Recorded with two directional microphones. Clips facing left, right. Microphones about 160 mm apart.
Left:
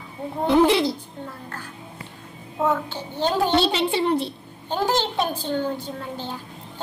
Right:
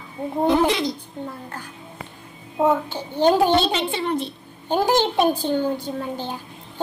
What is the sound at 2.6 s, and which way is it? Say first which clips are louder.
Speech: right 3 dB; 15° right (ahead or behind).